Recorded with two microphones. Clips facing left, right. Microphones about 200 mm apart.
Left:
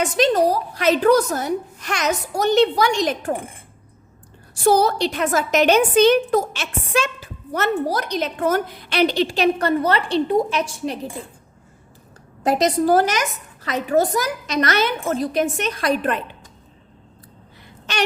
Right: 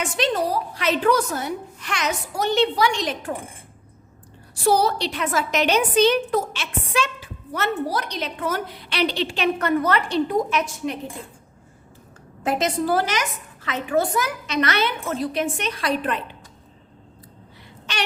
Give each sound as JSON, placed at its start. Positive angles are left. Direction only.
{"t": 0.0, "sound": "a woman's voice", "side_deg": 40}
{"t": 4.5, "sound": "a woman's voice", "side_deg": 45}
{"t": 12.4, "sound": "a woman's voice", "side_deg": 40}